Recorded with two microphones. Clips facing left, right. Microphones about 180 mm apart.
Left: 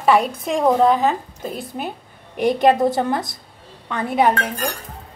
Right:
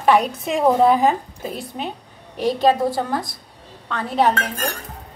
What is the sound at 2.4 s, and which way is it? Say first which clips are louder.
A woman's voice: left 2 dB; 15° left (ahead or behind).